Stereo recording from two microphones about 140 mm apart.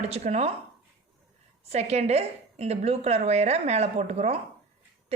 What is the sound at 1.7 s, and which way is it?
A woman's voice, 50° right (ahead or behind).